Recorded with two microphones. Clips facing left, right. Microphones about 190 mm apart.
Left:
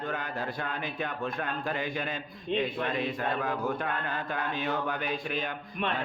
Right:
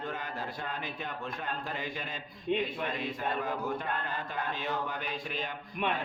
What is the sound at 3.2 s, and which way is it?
A man's voice, 60° left (ahead or behind).